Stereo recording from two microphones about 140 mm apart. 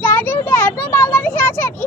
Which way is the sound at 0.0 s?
15° left (ahead or behind).